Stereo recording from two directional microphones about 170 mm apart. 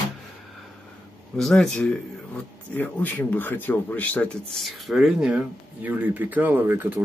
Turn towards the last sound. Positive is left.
turn(degrees=-10)  # may be behind; listen again after turning